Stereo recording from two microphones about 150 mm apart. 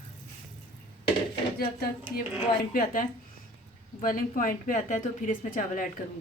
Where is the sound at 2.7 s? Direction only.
65° left (ahead or behind).